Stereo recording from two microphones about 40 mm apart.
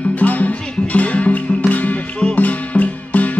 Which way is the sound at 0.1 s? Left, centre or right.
Left.